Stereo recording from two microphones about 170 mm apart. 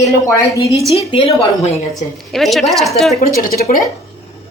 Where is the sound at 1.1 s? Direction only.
35° left (ahead or behind).